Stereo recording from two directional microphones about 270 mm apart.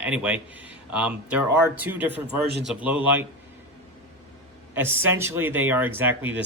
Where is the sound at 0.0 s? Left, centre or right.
Centre.